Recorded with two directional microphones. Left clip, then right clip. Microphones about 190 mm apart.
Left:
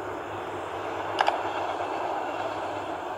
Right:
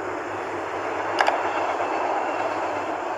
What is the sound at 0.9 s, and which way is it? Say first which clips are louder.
Vehicle: right 4 dB; 45° right (ahead or behind).